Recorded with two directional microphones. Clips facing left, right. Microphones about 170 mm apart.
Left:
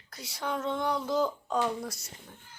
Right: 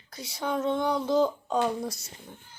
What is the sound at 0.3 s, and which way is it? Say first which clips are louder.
A woman's voice: right 4 dB; 20° right (ahead or behind).